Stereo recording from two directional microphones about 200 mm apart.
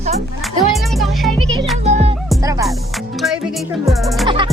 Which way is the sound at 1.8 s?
35° right (ahead or behind).